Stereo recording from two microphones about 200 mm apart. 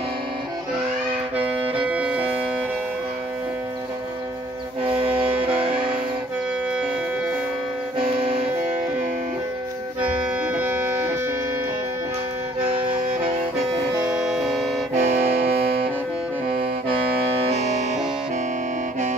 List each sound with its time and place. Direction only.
1.3 s music: 30° right (ahead or behind)
1.8 s music: 5° right (ahead or behind)
4.8 s music: 30° right (ahead or behind)
8.2 s music: 30° right (ahead or behind)
10.4 s music: 10° right (ahead or behind)
14.2 s music: centre (ahead or behind)
15.0 s music: 35° right (ahead or behind)
17.5 s music: 35° right (ahead or behind)